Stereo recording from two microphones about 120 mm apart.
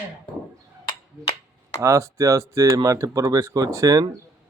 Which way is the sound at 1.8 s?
25° right (ahead or behind).